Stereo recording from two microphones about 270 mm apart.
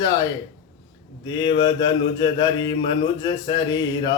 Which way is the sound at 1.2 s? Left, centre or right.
Centre.